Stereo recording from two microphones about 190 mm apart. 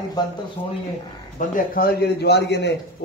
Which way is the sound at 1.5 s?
50° left (ahead or behind).